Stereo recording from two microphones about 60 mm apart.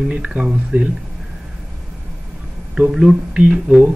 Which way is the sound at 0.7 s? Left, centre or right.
Right.